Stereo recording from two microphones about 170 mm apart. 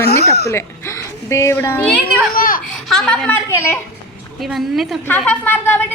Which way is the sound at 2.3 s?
55° left (ahead or behind).